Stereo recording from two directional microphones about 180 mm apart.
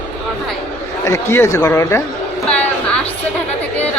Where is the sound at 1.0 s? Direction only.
15° left (ahead or behind).